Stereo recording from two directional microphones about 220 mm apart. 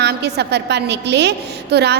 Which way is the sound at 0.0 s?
50° right (ahead or behind).